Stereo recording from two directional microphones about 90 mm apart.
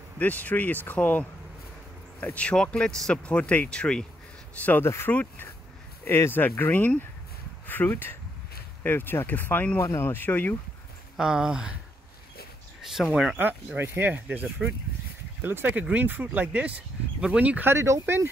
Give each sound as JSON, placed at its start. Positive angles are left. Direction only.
{"t": 0.2, "sound": "speech", "side_deg": 15}
{"t": 4.8, "sound": "speech", "side_deg": 30}
{"t": 5.1, "sound": "speech", "side_deg": 15}
{"t": 6.0, "sound": "speech", "side_deg": 25}
{"t": 11.1, "sound": "speech", "side_deg": -10}
{"t": 12.8, "sound": "speech", "side_deg": -5}
{"t": 13.7, "sound": "speech", "side_deg": -25}